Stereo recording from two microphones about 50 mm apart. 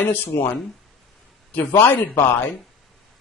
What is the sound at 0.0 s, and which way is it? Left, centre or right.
Speech, left.